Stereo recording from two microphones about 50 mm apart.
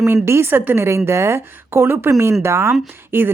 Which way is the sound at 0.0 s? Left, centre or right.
Right.